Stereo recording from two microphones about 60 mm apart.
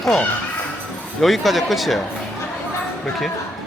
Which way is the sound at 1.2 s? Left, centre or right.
Centre.